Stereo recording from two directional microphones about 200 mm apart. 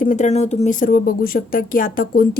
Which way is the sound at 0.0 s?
40° left (ahead or behind).